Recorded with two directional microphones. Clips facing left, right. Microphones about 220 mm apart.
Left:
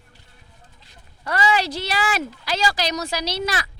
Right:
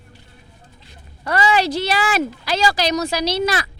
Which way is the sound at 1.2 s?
70° right (ahead or behind).